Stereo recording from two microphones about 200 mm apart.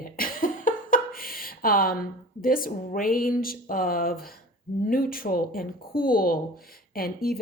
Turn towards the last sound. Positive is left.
turn(degrees=50)  # may be behind; listen again after turning